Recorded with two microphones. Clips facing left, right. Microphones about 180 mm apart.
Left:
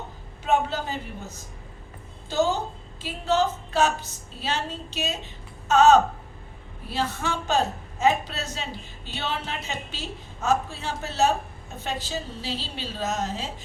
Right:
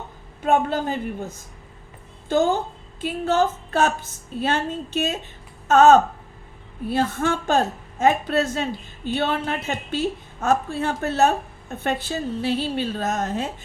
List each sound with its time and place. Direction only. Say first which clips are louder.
0.4 s a woman's voice: right 4 dB; 55° right (ahead or behind)